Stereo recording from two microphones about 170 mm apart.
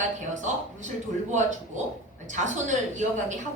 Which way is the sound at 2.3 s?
45° right (ahead or behind).